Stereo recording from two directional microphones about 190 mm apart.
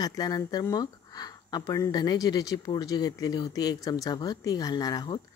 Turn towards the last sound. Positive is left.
turn(degrees=20)  # may be behind; listen again after turning